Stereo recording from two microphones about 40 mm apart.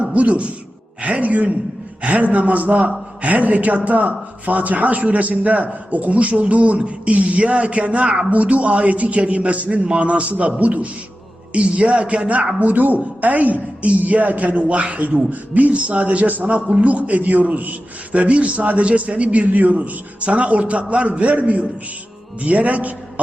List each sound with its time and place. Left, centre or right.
0.1 s speech: right
16.3 s a man's voice: right
16.6 s a man's voice: right
16.8 s speech: right